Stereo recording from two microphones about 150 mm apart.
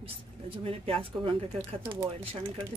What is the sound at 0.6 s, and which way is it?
Speech, 40° right (ahead or behind).